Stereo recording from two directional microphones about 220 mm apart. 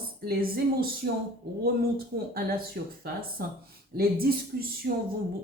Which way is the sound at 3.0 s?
40° right (ahead or behind).